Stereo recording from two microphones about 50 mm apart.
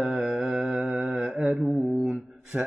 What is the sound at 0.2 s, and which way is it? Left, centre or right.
Mantra, centre.